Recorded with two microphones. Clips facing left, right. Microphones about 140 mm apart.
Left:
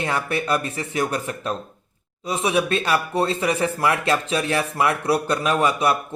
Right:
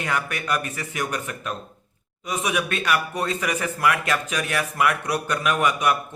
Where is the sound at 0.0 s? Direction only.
30° left (ahead or behind).